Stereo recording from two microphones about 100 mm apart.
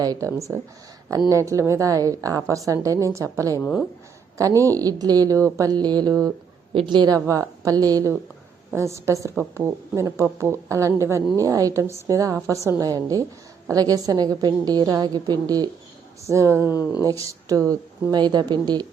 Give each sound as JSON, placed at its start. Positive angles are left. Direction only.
{"t": 0.0, "sound": "a woman's voice", "side_deg": -35}
{"t": 6.7, "sound": "speech", "side_deg": -50}
{"t": 7.3, "sound": "a woman's voice", "side_deg": -35}
{"t": 8.7, "sound": "a woman's voice", "side_deg": -30}
{"t": 16.2, "sound": "a woman's voice", "side_deg": -30}
{"t": 16.7, "sound": "speech", "side_deg": 35}
{"t": 17.1, "sound": "a woman's voice", "side_deg": -35}
{"t": 18.1, "sound": "speech", "side_deg": -45}